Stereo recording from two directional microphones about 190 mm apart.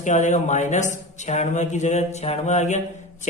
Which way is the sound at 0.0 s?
40° left (ahead or behind).